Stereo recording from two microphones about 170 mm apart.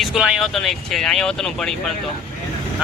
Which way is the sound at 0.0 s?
5° right (ahead or behind).